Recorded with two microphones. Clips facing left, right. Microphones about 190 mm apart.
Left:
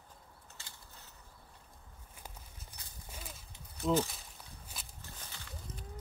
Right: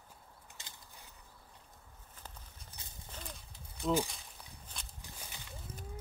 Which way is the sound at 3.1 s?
5° left (ahead or behind).